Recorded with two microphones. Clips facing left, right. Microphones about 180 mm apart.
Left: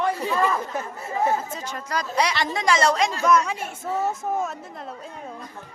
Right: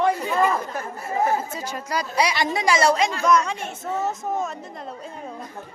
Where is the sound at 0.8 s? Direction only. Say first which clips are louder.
Right 1 dB; 25° left (ahead or behind).